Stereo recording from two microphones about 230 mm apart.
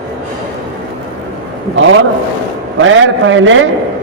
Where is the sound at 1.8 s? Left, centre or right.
Right.